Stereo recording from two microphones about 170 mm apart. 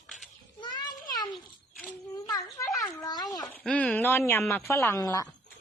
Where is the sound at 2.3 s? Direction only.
20° left (ahead or behind).